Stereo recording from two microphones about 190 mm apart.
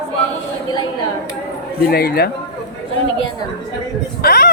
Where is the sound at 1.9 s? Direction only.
55° left (ahead or behind).